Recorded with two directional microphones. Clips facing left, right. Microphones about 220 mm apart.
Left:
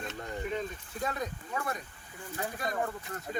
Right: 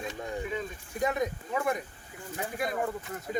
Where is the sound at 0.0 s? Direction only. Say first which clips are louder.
Right 2 dB; 10° right (ahead or behind).